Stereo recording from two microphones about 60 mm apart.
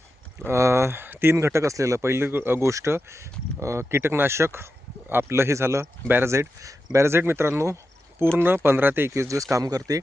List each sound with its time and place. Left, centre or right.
0.4 s speech: right
2.6 s speech: right
3.8 s speech: right
8.4 s speech: right